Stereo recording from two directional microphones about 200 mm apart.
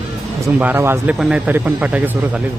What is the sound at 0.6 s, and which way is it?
Speech, 10° right (ahead or behind).